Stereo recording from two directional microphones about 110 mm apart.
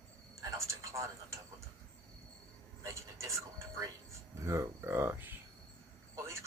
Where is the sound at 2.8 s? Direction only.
25° right (ahead or behind).